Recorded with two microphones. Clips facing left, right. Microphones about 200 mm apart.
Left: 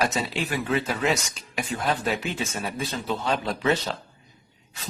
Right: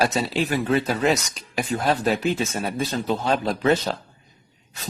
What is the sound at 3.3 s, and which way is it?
Speech, 45° right (ahead or behind).